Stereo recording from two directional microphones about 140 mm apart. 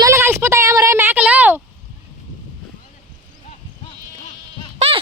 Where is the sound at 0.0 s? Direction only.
20° right (ahead or behind).